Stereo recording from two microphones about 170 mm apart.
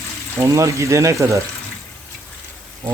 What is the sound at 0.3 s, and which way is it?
Speech, 15° right (ahead or behind).